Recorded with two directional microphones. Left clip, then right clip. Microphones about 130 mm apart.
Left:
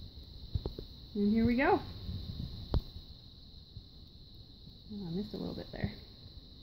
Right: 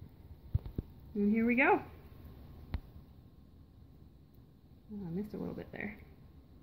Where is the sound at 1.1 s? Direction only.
35° left (ahead or behind).